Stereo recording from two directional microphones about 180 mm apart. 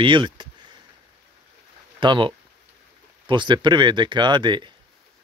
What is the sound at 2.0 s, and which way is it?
Speech, 25° right (ahead or behind).